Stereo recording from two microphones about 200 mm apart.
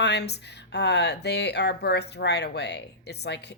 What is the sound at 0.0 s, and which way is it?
Speech, 55° left (ahead or behind).